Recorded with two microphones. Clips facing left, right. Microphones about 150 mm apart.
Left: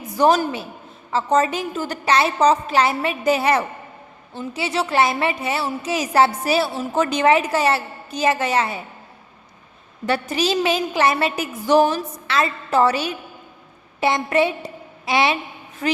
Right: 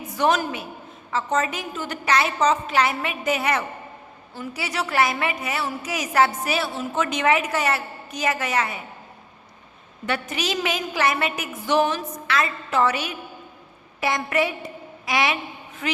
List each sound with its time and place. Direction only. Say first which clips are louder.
0.2 s a woman's voice: left 5 dB; 35° left (ahead or behind)
10.1 s a woman's voice: left 6 dB; 35° left (ahead or behind)